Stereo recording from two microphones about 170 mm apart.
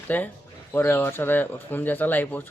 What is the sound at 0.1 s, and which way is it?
Speech, 10° left (ahead or behind).